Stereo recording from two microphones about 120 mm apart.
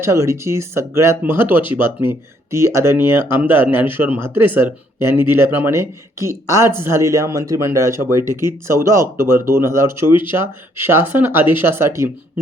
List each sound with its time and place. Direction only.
0.0 s speech: 25° right (ahead or behind)
10.1 s speech: 40° left (ahead or behind)
10.3 s speech: 20° right (ahead or behind)